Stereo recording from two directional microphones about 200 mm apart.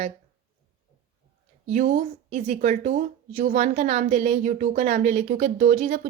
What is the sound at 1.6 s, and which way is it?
Speech, 40° right (ahead or behind).